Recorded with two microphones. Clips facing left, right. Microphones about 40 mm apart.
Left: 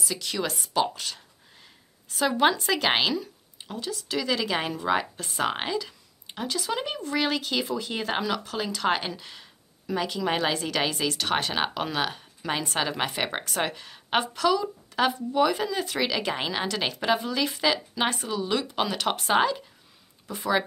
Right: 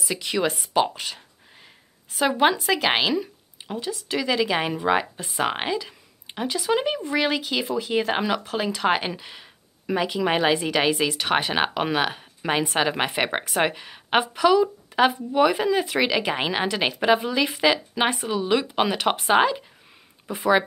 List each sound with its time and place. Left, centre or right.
0.0 s a woman's voice: right
8.2 s speech: centre